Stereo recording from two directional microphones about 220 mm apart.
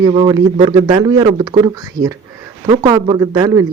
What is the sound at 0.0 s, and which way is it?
Speech, 20° right (ahead or behind).